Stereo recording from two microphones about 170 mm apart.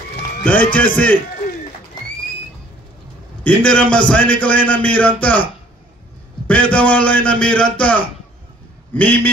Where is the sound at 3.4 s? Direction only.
5° left (ahead or behind).